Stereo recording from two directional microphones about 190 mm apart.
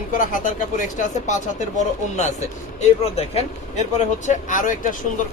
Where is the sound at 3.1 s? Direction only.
35° left (ahead or behind).